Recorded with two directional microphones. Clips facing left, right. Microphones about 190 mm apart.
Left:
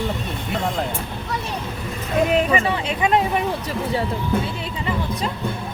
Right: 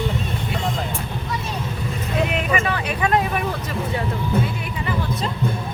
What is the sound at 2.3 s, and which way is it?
Speech, 30° left (ahead or behind).